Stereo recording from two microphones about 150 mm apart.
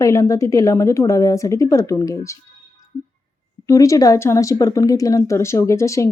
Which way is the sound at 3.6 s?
20° left (ahead or behind).